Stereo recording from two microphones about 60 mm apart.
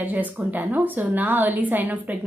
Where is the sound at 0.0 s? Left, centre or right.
Right.